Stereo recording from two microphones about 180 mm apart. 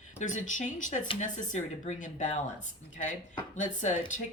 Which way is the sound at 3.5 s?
45° left (ahead or behind).